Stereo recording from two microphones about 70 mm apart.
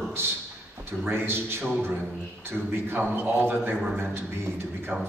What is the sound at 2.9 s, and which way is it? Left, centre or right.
Speech, right.